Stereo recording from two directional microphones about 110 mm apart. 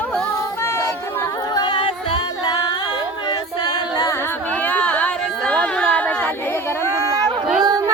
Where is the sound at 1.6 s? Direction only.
50° left (ahead or behind).